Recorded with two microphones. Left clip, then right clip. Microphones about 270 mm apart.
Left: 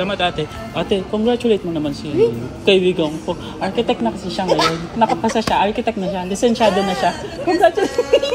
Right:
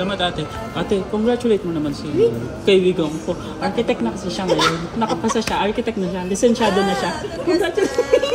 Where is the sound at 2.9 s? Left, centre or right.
Centre.